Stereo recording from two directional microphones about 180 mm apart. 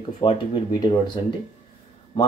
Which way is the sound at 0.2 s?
25° left (ahead or behind).